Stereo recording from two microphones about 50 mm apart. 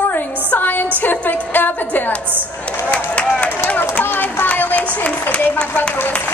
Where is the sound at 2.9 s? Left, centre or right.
Left.